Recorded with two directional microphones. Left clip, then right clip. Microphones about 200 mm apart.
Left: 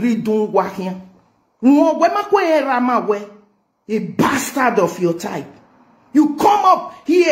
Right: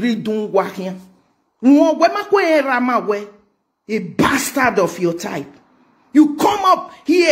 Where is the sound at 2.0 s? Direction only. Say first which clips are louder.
Even; 30° right (ahead or behind).